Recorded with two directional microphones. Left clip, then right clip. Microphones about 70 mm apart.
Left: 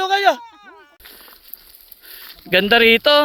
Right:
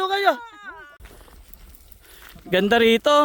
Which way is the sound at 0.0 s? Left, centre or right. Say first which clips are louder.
Left 4 dB; centre.